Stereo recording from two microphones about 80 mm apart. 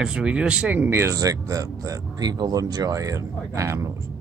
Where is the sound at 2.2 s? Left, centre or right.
Right.